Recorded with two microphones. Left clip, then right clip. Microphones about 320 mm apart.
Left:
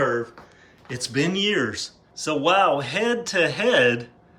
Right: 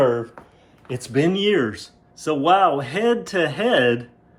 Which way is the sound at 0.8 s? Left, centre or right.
Centre.